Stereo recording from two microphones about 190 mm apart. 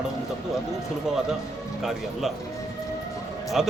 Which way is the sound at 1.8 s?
Centre (ahead or behind).